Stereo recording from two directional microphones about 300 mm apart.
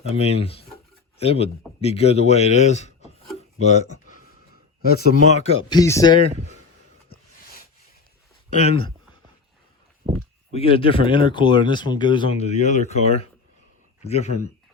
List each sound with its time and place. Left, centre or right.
0.0 s speech: left
4.9 s speech: left
7.1 s a sound: left
8.5 s speech: left
10.5 s speech: centre